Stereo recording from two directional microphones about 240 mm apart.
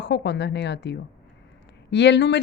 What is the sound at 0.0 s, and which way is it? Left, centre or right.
Speech, left.